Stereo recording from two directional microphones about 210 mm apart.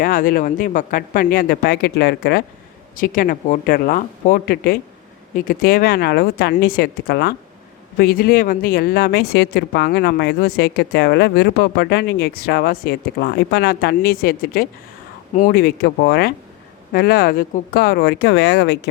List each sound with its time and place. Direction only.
0.0 s speech: 40° left (ahead or behind)
2.9 s speech: 40° left (ahead or behind)